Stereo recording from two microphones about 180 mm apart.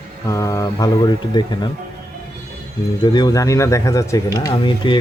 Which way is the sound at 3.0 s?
25° left (ahead or behind).